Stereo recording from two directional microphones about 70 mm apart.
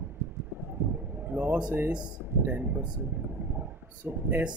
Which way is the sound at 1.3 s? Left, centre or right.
Right.